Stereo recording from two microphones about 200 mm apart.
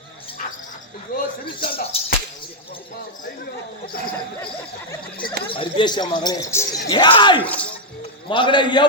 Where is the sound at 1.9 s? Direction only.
30° left (ahead or behind).